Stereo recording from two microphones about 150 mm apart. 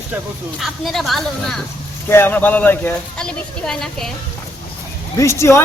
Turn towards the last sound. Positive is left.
turn(degrees=20)  # may be behind; listen again after turning